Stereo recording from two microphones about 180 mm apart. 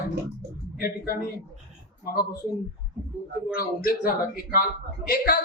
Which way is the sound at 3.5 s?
55° left (ahead or behind).